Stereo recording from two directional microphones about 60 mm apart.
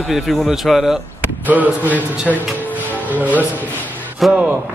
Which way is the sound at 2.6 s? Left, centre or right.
Right.